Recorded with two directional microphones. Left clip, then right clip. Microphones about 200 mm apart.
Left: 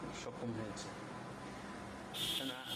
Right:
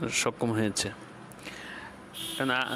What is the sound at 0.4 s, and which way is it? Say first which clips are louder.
Speech: right 14 dB; 55° right (ahead or behind).